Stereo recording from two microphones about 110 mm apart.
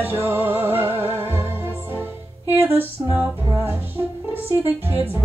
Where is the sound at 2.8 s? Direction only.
20° right (ahead or behind).